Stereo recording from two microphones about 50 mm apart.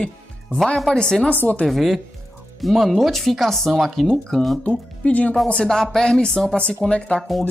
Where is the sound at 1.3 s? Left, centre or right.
Left.